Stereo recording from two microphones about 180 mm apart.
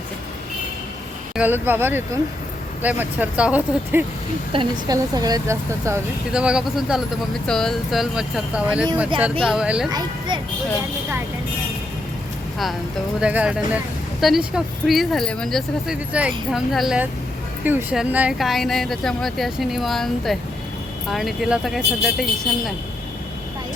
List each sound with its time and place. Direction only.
1.4 s speech: 10° right (ahead or behind)
4.5 s speech: 20° right (ahead or behind)
6.3 s speech: 5° right (ahead or behind)
9.9 s speech: 25° right (ahead or behind)
13.1 s speech: 5° right (ahead or behind)